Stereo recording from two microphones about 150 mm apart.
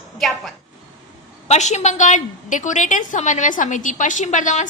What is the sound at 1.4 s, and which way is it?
A woman's voice, 50° left (ahead or behind).